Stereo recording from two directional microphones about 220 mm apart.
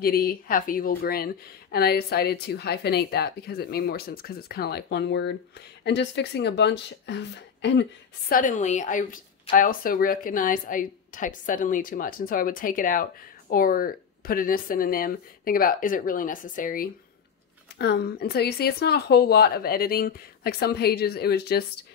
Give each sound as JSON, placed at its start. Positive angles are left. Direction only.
{"t": 0.0, "sound": "speech", "side_deg": 40}
{"t": 8.3, "sound": "speech", "side_deg": 40}